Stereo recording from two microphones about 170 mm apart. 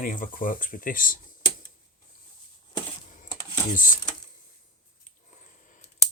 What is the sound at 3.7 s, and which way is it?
Speech, 50° left (ahead or behind).